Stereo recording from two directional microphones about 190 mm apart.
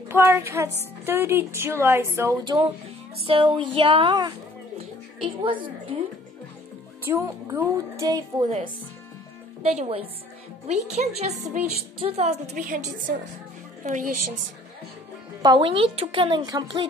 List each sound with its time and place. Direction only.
0.1 s a woman's voice: 10° right (ahead or behind)
3.3 s speech: 25° right (ahead or behind)
7.1 s a woman's voice: 15° right (ahead or behind)
8.5 s a woman's voice: 30° right (ahead or behind)
15.4 s speech: 25° right (ahead or behind)